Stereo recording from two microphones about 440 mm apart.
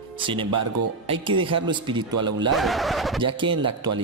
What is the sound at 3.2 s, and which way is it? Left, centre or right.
Speech, centre.